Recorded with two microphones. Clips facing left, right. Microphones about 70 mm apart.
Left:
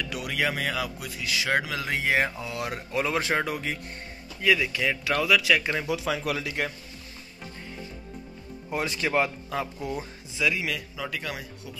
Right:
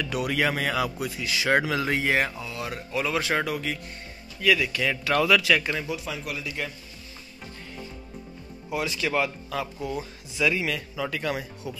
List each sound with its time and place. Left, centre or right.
0.0 s speech: centre
2.4 s speech: left; by 4.9 s centre
5.0 s speech: centre
5.9 s speech: left
8.7 s speech: left
9.1 s speech: left
10.4 s speech: centre